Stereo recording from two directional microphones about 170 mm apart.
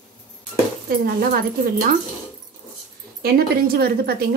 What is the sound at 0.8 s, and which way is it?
A woman's voice, 60° right (ahead or behind).